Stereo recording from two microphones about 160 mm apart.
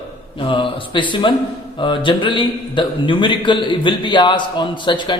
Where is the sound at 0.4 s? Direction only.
30° left (ahead or behind).